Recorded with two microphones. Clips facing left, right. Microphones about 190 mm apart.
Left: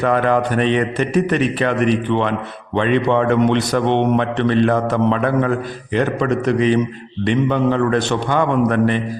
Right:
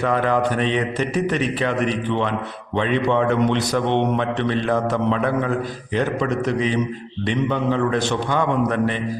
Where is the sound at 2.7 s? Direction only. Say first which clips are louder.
Left 3 dB; 60° left (ahead or behind).